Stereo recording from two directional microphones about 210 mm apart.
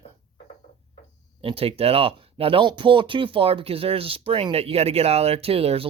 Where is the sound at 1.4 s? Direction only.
25° right (ahead or behind).